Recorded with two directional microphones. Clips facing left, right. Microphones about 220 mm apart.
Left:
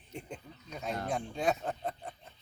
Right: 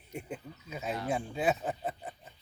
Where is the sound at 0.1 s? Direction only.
5° right (ahead or behind).